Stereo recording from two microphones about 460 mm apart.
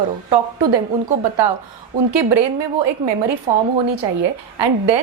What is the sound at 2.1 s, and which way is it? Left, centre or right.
Speech, right.